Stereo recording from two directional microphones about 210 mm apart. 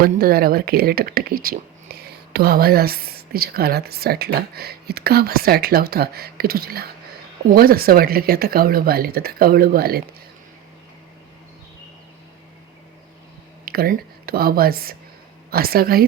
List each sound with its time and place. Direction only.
0.0 s speech: 45° right (ahead or behind)
13.7 s speech: 45° right (ahead or behind)